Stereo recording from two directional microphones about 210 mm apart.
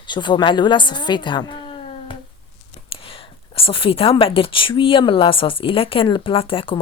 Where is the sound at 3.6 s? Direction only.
25° left (ahead or behind).